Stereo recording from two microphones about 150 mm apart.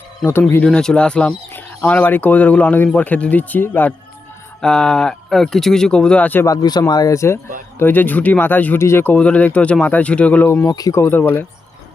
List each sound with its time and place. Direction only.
0.3 s speech: 15° left (ahead or behind)
6.4 s speech: 25° left (ahead or behind)